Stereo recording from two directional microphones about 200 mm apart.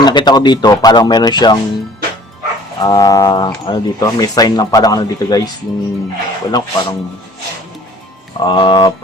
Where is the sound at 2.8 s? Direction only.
20° left (ahead or behind).